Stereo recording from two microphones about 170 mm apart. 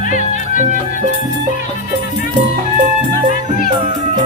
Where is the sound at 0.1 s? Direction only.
50° left (ahead or behind).